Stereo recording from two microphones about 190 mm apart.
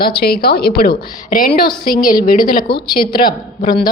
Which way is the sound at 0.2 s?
55° left (ahead or behind).